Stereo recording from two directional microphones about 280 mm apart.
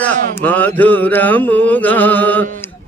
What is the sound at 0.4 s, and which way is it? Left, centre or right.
Mantra, centre.